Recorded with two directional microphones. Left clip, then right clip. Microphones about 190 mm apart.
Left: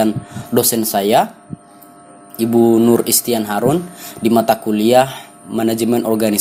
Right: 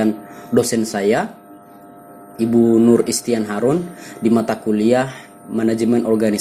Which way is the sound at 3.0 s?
90° left.